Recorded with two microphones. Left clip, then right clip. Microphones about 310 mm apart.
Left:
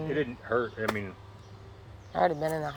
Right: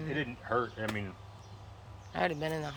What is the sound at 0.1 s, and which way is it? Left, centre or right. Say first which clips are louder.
Speech: left 4 dB; centre.